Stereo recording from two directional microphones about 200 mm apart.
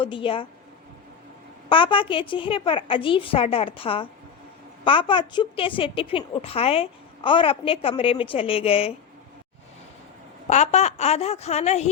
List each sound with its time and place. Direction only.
0.0 s a woman's voice: 25° left (ahead or behind)
1.7 s a woman's voice: 25° left (ahead or behind)
10.5 s a woman's voice: 35° left (ahead or behind)